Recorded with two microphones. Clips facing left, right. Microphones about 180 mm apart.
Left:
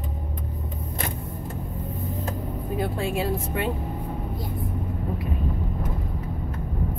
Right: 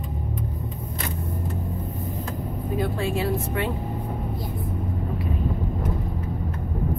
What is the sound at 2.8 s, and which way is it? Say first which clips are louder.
Speech: right 1 dB; 25° left (ahead or behind).